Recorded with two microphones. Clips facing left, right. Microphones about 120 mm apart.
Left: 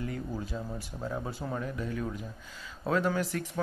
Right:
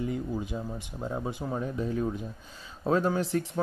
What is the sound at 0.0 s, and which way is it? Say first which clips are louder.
Speech: right 4 dB; 20° right (ahead or behind).